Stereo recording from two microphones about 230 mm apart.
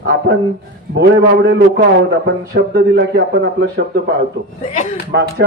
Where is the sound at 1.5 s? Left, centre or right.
Right.